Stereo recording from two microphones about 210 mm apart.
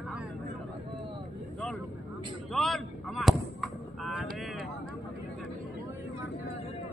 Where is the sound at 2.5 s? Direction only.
Centre (ahead or behind).